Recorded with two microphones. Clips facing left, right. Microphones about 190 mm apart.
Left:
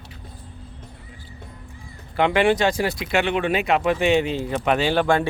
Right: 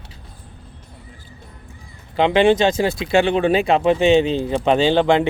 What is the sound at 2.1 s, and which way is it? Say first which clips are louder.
Speech: right 4 dB; 20° right (ahead or behind).